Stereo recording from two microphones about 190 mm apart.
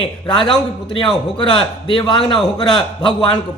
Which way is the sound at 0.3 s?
25° left (ahead or behind).